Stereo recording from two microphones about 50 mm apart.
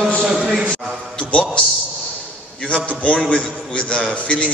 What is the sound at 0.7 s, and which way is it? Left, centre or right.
Speech, centre.